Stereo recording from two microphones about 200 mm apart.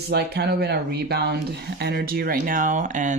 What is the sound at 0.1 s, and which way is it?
Speech, 55° right (ahead or behind).